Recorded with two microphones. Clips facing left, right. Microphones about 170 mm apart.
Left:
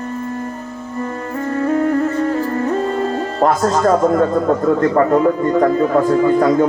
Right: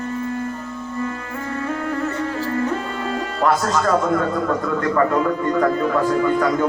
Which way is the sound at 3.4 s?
40° left (ahead or behind).